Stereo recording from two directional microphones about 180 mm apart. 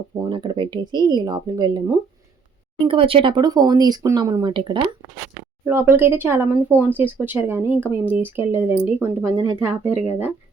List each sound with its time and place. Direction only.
0.2 s speech: 25° right (ahead or behind)
5.6 s speech: 15° right (ahead or behind)